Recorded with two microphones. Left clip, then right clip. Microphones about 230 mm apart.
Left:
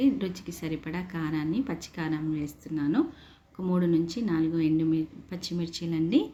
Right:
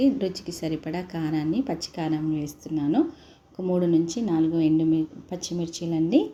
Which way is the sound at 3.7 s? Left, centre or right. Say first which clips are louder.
Right 4 dB; centre.